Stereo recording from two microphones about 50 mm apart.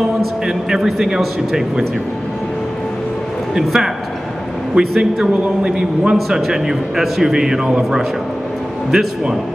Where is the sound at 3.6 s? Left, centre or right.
Centre.